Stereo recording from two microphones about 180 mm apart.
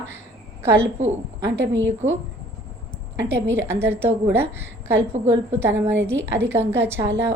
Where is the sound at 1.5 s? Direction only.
90° right.